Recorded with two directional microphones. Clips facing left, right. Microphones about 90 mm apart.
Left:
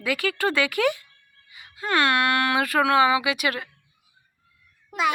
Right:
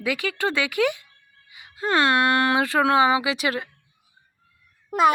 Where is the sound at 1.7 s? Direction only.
30° right (ahead or behind).